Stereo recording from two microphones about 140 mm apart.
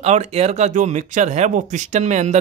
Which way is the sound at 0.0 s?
50° right (ahead or behind).